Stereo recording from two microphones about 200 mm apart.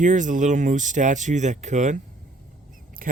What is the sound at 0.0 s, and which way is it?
Speech, 40° right (ahead or behind).